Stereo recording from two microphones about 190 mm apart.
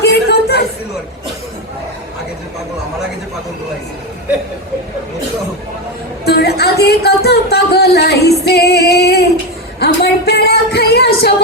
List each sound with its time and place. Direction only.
0.0 s chatter: 60° left (ahead or behind)
6.2 s a sound: 60° left (ahead or behind)
9.8 s music: 60° left (ahead or behind)